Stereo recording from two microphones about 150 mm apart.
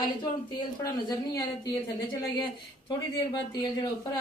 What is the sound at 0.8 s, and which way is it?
A woman's voice, 25° left (ahead or behind).